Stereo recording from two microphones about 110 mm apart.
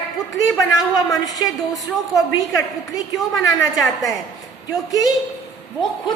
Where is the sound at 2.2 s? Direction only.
30° left (ahead or behind).